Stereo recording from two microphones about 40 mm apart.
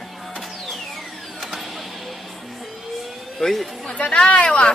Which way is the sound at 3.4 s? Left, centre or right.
Centre.